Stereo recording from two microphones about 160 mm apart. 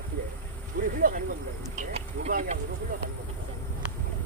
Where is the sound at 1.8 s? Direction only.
50° right (ahead or behind).